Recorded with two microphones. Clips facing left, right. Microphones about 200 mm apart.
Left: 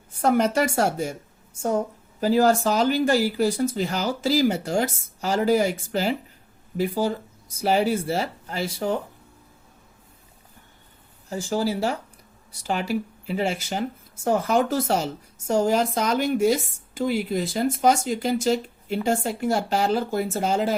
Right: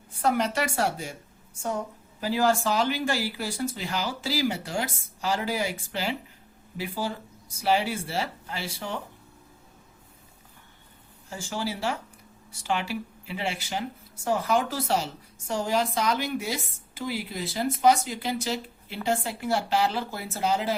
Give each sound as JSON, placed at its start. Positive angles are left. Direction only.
{"t": 0.2, "sound": "speech", "side_deg": 45}
{"t": 2.2, "sound": "speech", "side_deg": 45}
{"t": 11.3, "sound": "speech", "side_deg": 40}